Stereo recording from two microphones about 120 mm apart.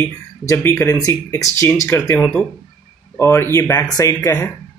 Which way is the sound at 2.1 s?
5° left (ahead or behind).